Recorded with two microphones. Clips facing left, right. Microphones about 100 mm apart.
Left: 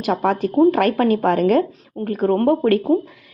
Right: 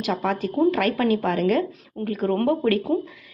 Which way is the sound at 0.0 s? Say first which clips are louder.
Left 5 dB; 45° left (ahead or behind).